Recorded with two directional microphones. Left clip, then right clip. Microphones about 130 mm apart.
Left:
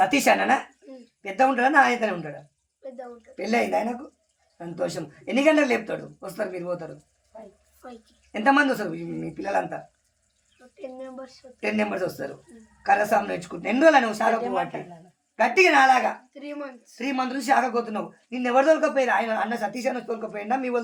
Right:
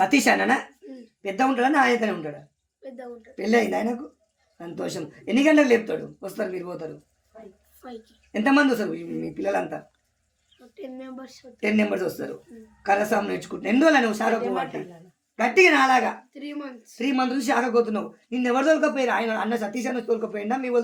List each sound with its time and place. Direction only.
0.0 s a man's voice: 30° right (ahead or behind)
3.3 s a man's voice: 30° right (ahead or behind)
7.8 s a woman's voice: 5° right (ahead or behind)
8.3 s speech: 30° right (ahead or behind)
10.8 s speech: 10° right (ahead or behind)
11.6 s a man's voice: 30° right (ahead or behind)
16.3 s speech: 10° right (ahead or behind)
17.0 s a man's voice: 30° right (ahead or behind)